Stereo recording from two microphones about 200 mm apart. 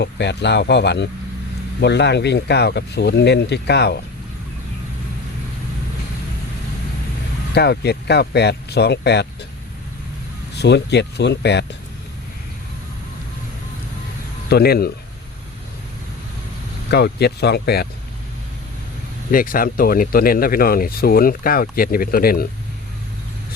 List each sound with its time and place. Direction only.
0.0 s speech: 60° left (ahead or behind)
7.5 s speech: 55° left (ahead or behind)
10.5 s speech: 55° left (ahead or behind)
14.5 s speech: 50° left (ahead or behind)
16.9 s speech: 55° left (ahead or behind)
19.3 s speech: 45° left (ahead or behind)